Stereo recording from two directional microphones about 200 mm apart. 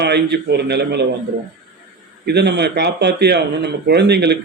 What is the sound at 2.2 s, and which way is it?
A man's voice, 55° right (ahead or behind).